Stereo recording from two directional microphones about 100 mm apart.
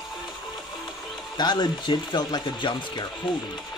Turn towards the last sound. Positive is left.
turn(degrees=50)  # may be behind; listen again after turning